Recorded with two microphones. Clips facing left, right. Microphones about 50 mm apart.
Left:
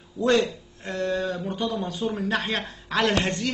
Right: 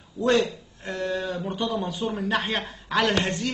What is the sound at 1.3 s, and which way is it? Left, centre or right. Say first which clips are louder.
Speech: even; centre.